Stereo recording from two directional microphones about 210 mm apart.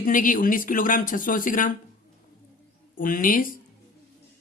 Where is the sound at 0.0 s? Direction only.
40° left (ahead or behind).